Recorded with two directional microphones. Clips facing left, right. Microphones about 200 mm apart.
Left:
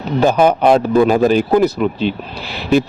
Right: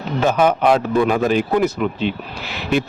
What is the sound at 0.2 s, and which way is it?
A man's voice, 35° left (ahead or behind).